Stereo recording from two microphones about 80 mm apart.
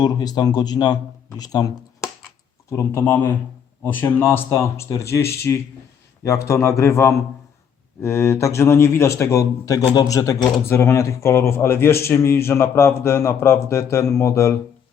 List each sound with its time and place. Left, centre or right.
0.0 s speech: left
2.6 s speech: left
3.0 s a man's voice: left
10.7 s a man's voice: left